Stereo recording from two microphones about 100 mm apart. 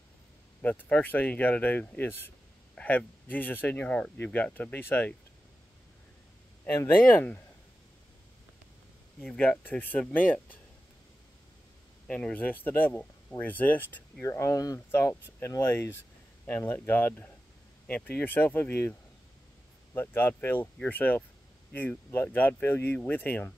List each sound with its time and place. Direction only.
0.6 s speech: 15° left (ahead or behind)
6.6 s speech: 20° left (ahead or behind)
9.2 s speech: 20° left (ahead or behind)
12.1 s speech: 10° left (ahead or behind)
14.2 s speech: 30° left (ahead or behind)